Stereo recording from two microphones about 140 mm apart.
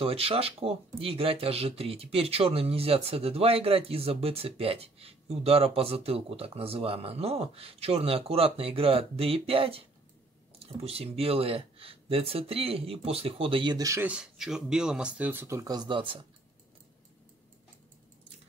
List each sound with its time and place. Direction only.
0.0 s speech: 45° right (ahead or behind); by 14.0 s 25° right (ahead or behind)
14.0 s speech: 5° right (ahead or behind); by 16.2 s 35° right (ahead or behind)